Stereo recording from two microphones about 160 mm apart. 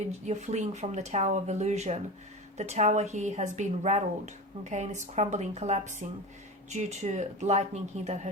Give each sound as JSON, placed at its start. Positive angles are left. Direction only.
{"t": 0.3, "sound": "speech", "side_deg": -45}